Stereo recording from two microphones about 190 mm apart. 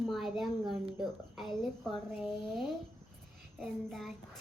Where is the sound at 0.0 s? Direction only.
Centre (ahead or behind).